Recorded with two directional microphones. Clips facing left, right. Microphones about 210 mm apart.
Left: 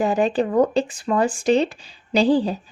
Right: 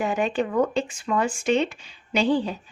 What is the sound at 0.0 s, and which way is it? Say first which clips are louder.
Speech: left 5 dB; 35° left (ahead or behind).